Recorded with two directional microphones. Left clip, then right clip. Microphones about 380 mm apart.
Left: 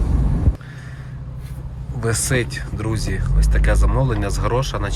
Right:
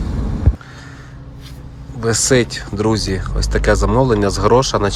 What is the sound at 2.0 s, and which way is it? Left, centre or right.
Speech, centre.